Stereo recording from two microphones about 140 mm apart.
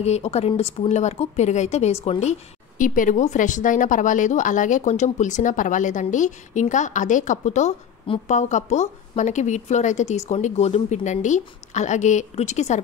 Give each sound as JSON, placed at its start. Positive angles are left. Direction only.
{"t": 0.0, "sound": "a woman's voice", "side_deg": 50}
{"t": 2.8, "sound": "a woman's voice", "side_deg": 70}